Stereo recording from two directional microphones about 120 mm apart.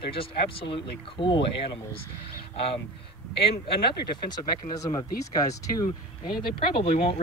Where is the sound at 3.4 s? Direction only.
45° left (ahead or behind).